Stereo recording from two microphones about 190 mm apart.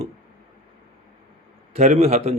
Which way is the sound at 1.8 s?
35° right (ahead or behind).